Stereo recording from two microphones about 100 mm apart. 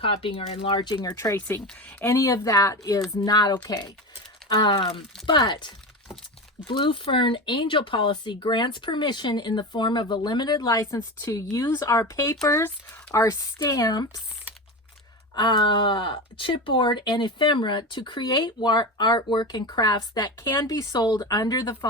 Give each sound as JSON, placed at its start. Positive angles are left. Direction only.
{"t": 0.0, "sound": "speech", "side_deg": 65}
{"t": 1.1, "sound": "speech", "side_deg": 25}
{"t": 15.4, "sound": "speech", "side_deg": 50}